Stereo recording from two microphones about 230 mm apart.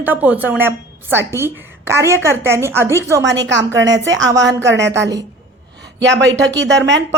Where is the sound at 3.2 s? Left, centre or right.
Right.